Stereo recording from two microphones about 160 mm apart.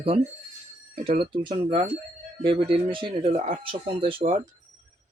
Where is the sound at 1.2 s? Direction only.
30° right (ahead or behind).